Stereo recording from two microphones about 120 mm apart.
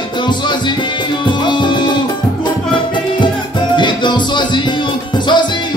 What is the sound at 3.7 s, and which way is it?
Music, 40° left (ahead or behind).